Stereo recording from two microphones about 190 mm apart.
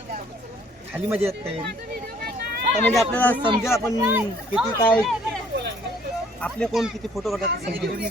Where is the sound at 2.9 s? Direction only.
5° left (ahead or behind).